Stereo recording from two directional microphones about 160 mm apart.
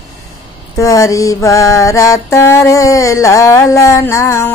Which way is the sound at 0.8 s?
20° left (ahead or behind).